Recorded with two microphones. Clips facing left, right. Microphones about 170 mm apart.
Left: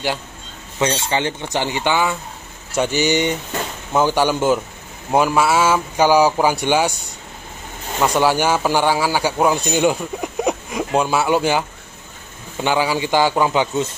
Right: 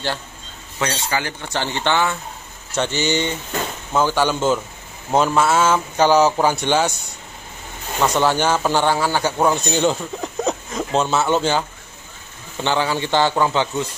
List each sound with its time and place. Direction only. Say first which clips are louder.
0.7 s speech: left 4 dB; 20° left (ahead or behind)
8.0 s speech: left 1 dB; 10° left (ahead or behind)
12.6 s speech: left 2 dB; 10° left (ahead or behind)